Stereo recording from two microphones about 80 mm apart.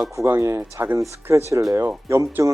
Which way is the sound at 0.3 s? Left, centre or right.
Right.